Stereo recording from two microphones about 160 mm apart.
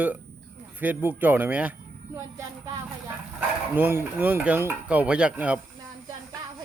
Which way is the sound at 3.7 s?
10° right (ahead or behind).